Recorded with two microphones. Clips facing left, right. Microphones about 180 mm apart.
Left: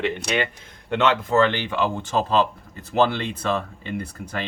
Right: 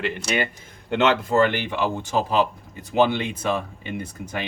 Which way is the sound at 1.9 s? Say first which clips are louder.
Even; 15° right (ahead or behind).